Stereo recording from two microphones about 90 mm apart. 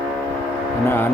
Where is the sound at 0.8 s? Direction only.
25° left (ahead or behind).